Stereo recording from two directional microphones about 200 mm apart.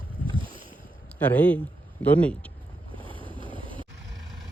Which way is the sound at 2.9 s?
25° right (ahead or behind).